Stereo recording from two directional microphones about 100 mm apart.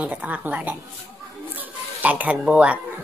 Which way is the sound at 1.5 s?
15° right (ahead or behind).